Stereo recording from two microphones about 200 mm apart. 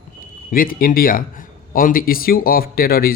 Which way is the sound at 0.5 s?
45° left (ahead or behind).